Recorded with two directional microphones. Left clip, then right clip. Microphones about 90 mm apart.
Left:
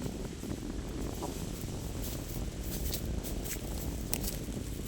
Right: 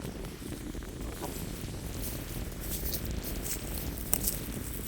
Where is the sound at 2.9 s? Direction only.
Centre (ahead or behind).